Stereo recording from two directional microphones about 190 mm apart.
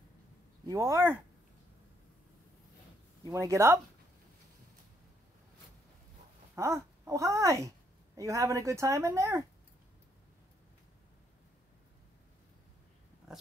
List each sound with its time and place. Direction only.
0.7 s a woman's voice: 15° right (ahead or behind)
3.3 s a woman's voice: 15° right (ahead or behind)
6.5 s a woman's voice: 15° right (ahead or behind)